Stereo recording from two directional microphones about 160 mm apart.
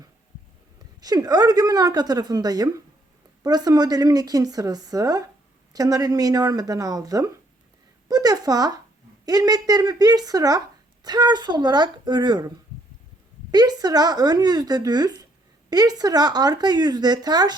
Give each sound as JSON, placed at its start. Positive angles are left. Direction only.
{"t": 1.0, "sound": "a woman's voice", "side_deg": -25}
{"t": 13.5, "sound": "a woman's voice", "side_deg": -25}